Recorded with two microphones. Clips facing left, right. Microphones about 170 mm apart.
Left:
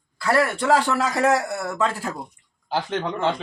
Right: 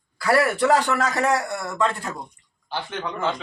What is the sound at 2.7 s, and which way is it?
Speech, 35° left (ahead or behind).